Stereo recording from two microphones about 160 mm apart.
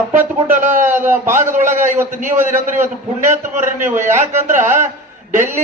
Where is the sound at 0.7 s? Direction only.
15° right (ahead or behind).